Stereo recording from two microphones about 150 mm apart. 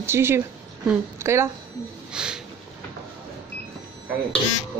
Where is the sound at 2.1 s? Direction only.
5° right (ahead or behind).